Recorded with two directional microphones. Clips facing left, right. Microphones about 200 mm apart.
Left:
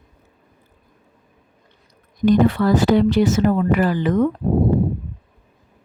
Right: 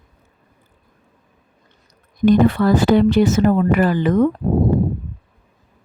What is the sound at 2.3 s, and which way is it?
Speech, 55° right (ahead or behind).